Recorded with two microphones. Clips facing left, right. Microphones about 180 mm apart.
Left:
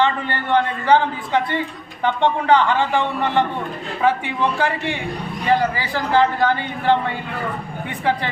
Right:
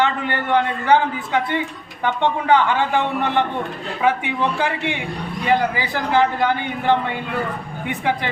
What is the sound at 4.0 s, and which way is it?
A man's voice, 15° right (ahead or behind).